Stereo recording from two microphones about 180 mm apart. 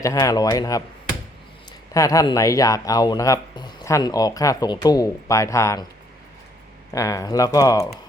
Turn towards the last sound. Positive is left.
turn(degrees=20)  # may be behind; listen again after turning